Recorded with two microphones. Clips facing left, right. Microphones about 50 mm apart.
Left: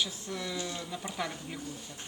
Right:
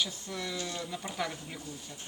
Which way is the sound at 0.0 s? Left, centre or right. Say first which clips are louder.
Even; centre.